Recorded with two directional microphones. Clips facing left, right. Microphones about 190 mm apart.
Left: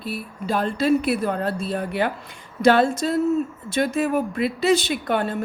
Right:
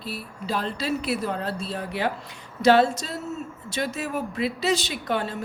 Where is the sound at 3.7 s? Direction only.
55° left (ahead or behind).